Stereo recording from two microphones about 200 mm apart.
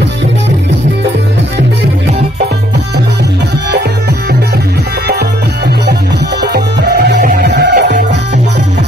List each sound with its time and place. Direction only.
6.4 s music: 60° right (ahead or behind)